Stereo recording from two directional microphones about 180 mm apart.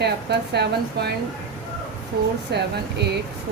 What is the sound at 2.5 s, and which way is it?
Speech, 70° right (ahead or behind).